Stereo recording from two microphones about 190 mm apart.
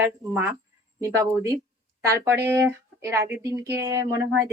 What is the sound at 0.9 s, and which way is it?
Speech, 15° right (ahead or behind).